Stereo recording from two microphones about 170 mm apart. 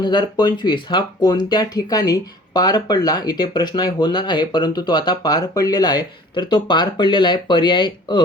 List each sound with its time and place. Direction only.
0.0 s speech: 25° left (ahead or behind)